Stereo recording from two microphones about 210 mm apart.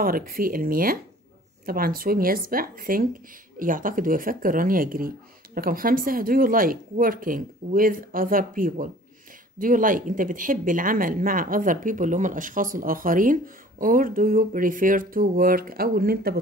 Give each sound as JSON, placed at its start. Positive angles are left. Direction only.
{"t": 0.0, "sound": "speech", "side_deg": -45}